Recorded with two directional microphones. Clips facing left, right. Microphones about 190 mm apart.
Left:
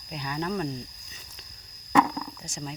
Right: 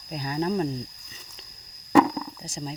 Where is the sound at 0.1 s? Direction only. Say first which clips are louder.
Right 4 dB; 35° right (ahead or behind).